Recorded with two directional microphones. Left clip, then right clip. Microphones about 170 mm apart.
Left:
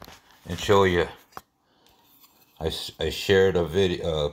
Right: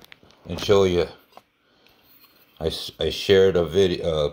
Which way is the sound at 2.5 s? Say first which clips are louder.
Right 3 dB; 20° left (ahead or behind).